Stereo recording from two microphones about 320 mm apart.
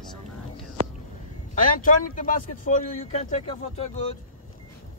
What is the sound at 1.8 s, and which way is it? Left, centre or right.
Speech, left.